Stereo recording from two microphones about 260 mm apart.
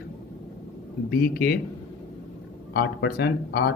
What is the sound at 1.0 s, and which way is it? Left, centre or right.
Speech, left.